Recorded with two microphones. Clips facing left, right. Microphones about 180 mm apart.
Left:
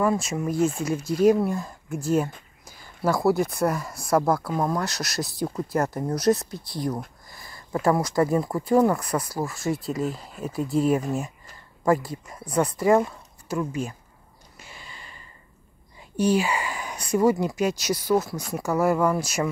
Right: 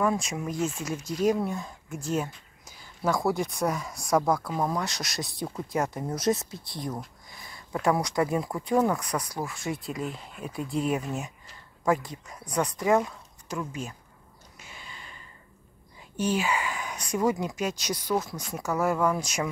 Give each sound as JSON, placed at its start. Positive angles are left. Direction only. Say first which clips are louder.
{"t": 0.0, "sound": "speech", "louder": "left 3 dB", "side_deg": 5}
{"t": 0.6, "sound": "speech", "louder": "left 7 dB", "side_deg": 50}
{"t": 0.8, "sound": "speech", "louder": "left 6 dB", "side_deg": 10}
{"t": 2.6, "sound": "a sound", "louder": "left 3 dB", "side_deg": 5}
{"t": 3.5, "sound": "speech", "louder": "left 4 dB", "side_deg": 5}
{"t": 10.0, "sound": "speech", "louder": "left 6 dB", "side_deg": 40}
{"t": 10.7, "sound": "speech", "louder": "left 6 dB", "side_deg": 5}
{"t": 14.9, "sound": "a sound", "louder": "left 1 dB", "side_deg": 0}
{"t": 16.3, "sound": "speech", "louder": "left 3 dB", "side_deg": 10}